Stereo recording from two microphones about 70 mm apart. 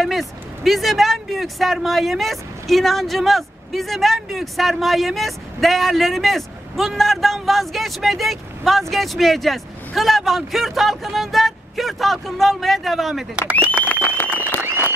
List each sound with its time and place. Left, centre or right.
0.0 s speech: centre
14.1 s applause: left